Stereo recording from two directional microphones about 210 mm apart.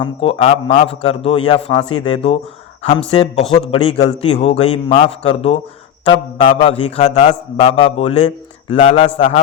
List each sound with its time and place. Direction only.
0.0 s a man's voice: 25° left (ahead or behind)